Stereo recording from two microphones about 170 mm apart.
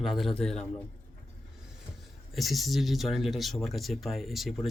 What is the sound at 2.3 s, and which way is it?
Speech, centre (ahead or behind).